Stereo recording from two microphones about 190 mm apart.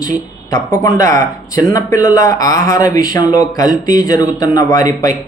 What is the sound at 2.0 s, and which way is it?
Speech, 15° left (ahead or behind).